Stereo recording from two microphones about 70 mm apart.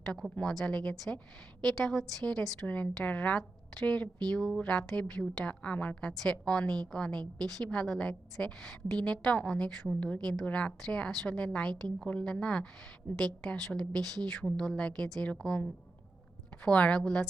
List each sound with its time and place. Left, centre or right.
0.0 s a woman's voice: centre
2.6 s a woman's voice: left
5.5 s a woman's voice: centre
16.6 s a woman's voice: centre